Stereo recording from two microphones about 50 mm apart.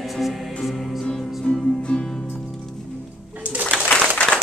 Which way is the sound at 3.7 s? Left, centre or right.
Left.